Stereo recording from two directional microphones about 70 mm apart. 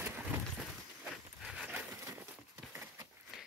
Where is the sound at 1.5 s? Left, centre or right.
Centre.